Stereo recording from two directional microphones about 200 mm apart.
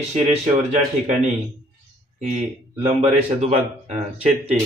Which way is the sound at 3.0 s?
35° right (ahead or behind).